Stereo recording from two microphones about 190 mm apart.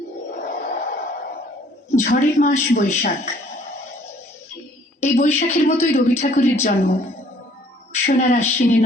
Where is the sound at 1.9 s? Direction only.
45° left (ahead or behind).